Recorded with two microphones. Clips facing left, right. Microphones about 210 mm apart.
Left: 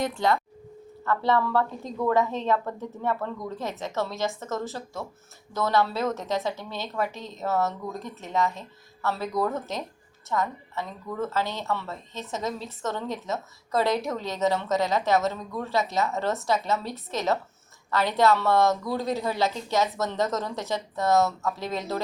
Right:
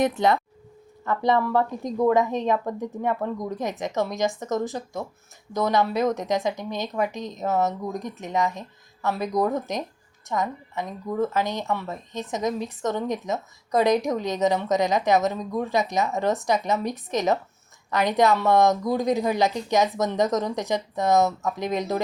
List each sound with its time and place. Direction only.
0.0 s a woman's voice: 20° right (ahead or behind)